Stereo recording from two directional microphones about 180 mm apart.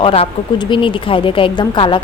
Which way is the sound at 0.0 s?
35° left (ahead or behind).